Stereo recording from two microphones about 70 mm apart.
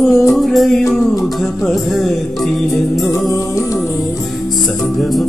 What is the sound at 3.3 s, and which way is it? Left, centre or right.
Music, left.